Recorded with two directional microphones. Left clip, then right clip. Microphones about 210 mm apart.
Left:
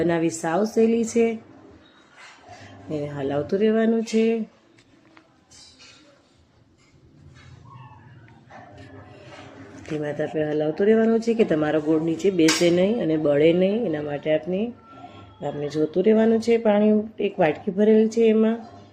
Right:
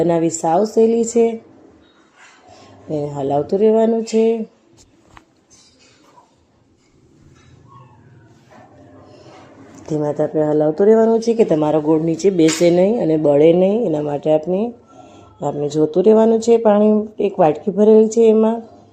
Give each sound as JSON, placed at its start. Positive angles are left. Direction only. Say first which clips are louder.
{"t": 0.0, "sound": "speech", "louder": "right 7 dB", "side_deg": -10}
{"t": 2.9, "sound": "speech", "louder": "right 7 dB", "side_deg": -10}
{"t": 10.0, "sound": "speech", "louder": "right 8 dB", "side_deg": 5}
{"t": 11.0, "sound": "speech", "louder": "right 6 dB", "side_deg": -15}